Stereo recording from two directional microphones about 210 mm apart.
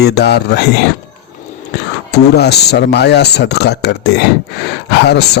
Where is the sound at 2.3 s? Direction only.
50° left (ahead or behind).